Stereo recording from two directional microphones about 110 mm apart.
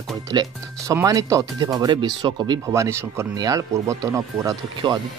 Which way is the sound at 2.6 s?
25° right (ahead or behind).